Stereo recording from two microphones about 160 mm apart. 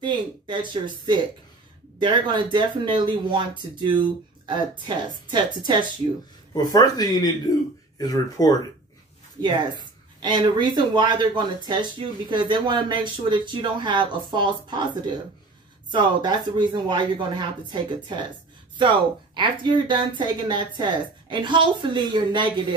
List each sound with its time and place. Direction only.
0.0 s speech: 30° right (ahead or behind)
6.5 s speech: 25° left (ahead or behind)
9.4 s speech: 25° right (ahead or behind)